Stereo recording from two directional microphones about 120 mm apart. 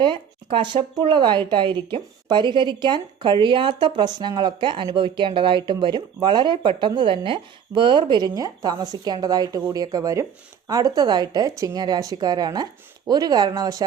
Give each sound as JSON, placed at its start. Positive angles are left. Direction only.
{"t": 0.0, "sound": "speech", "side_deg": -45}